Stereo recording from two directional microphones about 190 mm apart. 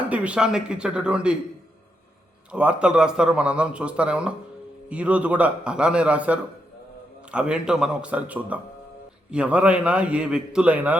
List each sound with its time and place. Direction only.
0.1 s a man's voice: 5° right (ahead or behind)
2.5 s a man's voice: 5° right (ahead or behind)